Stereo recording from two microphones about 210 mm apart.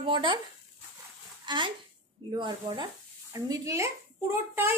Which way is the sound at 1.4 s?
20° right (ahead or behind).